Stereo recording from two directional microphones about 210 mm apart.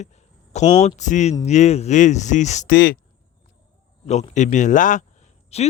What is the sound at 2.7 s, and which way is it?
Speech, 45° left (ahead or behind).